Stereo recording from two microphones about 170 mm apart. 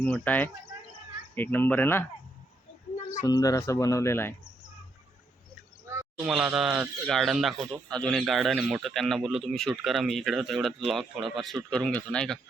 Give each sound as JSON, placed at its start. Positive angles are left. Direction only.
{"t": 0.0, "sound": "speech", "side_deg": 10}
{"t": 3.2, "sound": "speech", "side_deg": 20}
{"t": 6.2, "sound": "speech", "side_deg": -5}